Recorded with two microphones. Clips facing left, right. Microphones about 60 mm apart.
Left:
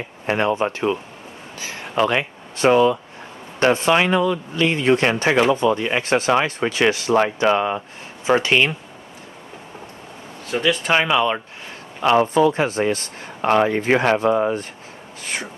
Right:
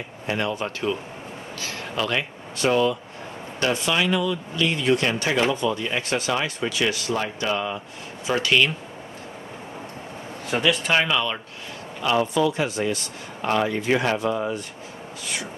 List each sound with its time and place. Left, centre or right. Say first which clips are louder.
0.3 s speech: left 6 dB; left
1.6 s a sound: left 7 dB; left
2.6 s speech: left 6 dB; left
3.6 s speech: left 6 dB; left
6.0 s speech: left 6 dB; left
6.3 s speech: left 6 dB; left
6.9 s speech: left 7 dB; left
7.4 s speech: left 8 dB; left
8.4 s speech: right 1 dB; left
10.6 s speech: left 2 dB; centre
10.9 s speech: left 4 dB; left
12.0 s speech: left 6 dB; left
13.4 s speech: left 6 dB; left
15.2 s a sound: left 4 dB; left